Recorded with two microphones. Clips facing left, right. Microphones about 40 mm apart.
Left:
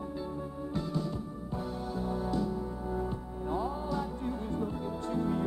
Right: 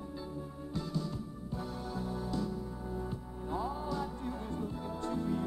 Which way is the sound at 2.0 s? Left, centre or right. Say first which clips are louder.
Left 5 dB; left.